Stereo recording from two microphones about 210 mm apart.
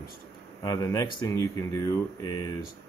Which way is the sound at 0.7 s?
15° left (ahead or behind).